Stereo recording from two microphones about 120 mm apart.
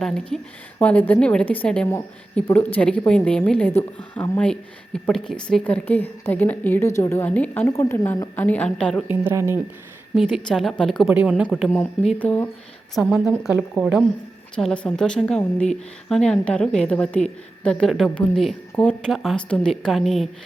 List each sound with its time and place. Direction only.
0.0 s speech: 5° left (ahead or behind); by 7.3 s 25° left (ahead or behind)
7.3 s speech: 10° left (ahead or behind)
7.7 s a woman's voice: 20° left (ahead or behind)
9.0 s speech: 20° right (ahead or behind)
10.2 s speech: 5° right (ahead or behind)
11.1 s speech: 10° right (ahead or behind)
12.2 s speech: 15° left (ahead or behind)
12.9 s speech: 5° right (ahead or behind)
14.5 s speech: 5° left (ahead or behind)
19.1 s speech: centre (ahead or behind)